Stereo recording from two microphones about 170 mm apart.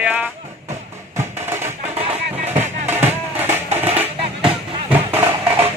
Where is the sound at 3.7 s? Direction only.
40° right (ahead or behind).